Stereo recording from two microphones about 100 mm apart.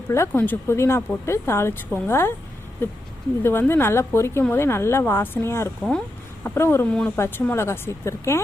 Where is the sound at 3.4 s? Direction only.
25° left (ahead or behind).